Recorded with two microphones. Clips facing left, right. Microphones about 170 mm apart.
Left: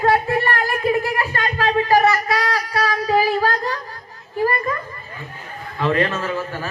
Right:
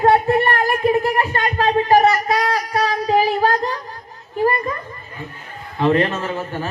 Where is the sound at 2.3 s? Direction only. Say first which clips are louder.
Right 2 dB; 20° right (ahead or behind).